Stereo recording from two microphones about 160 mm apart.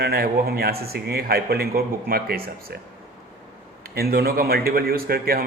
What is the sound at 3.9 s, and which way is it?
A man's voice, 70° right (ahead or behind).